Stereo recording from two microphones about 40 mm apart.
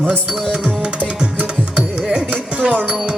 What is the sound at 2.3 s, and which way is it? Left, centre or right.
Music, right.